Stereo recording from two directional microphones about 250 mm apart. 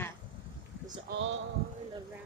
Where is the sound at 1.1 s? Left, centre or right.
Right.